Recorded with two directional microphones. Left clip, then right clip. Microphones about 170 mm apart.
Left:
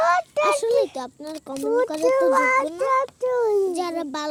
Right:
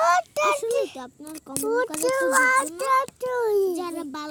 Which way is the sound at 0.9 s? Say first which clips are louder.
Left 6 dB; 10° right (ahead or behind).